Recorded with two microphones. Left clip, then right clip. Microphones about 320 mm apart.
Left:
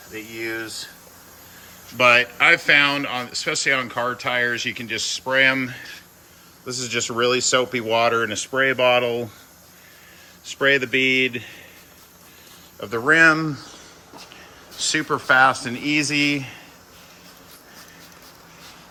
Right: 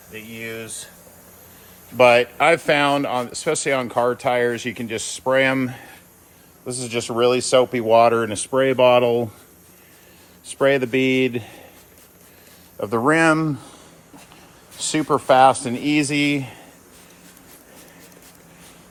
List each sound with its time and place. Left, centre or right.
2.0 s speech: centre
6.8 s speech: centre
10.5 s speech: centre
12.8 s speech: centre
15.0 s speech: centre